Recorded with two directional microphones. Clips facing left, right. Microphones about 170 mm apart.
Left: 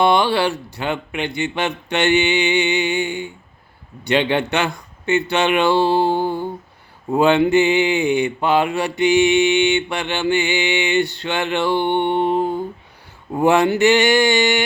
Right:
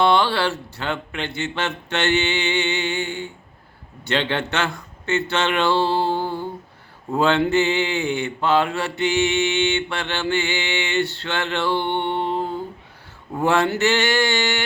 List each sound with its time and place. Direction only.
0.0 s speech: 15° left (ahead or behind)